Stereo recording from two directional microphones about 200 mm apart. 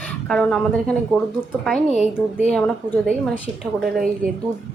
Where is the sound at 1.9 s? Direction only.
35° left (ahead or behind).